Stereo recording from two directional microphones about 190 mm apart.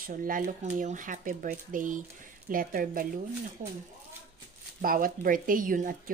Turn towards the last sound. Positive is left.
turn(degrees=-45)  # may be behind; listen again after turning